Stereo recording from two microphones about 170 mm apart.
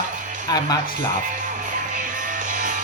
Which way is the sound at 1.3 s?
50° right (ahead or behind).